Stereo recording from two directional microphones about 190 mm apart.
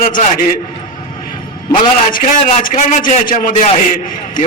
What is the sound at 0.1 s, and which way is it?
Speech, 45° left (ahead or behind).